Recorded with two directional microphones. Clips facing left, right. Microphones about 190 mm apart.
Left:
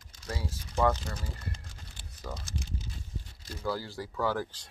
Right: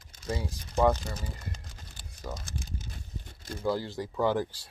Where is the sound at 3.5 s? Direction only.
20° right (ahead or behind).